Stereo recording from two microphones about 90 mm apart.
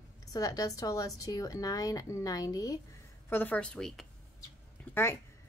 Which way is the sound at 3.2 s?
20° left (ahead or behind).